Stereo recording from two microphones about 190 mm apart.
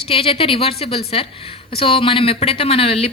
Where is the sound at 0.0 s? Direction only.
30° left (ahead or behind).